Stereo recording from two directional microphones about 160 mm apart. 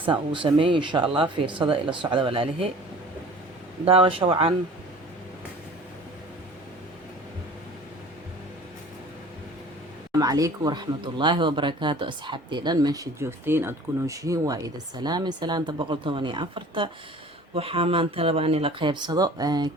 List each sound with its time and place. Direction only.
0.0 s speech: 30° right (ahead or behind)
3.8 s speech: 35° right (ahead or behind)
10.1 s speech: 20° right (ahead or behind)